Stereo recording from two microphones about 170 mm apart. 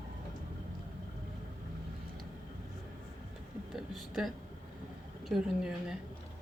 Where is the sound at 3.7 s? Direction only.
Centre (ahead or behind).